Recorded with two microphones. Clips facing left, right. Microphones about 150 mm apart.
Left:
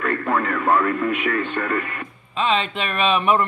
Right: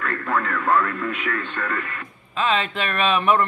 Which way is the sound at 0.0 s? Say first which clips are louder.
Left 3 dB; 20° left (ahead or behind).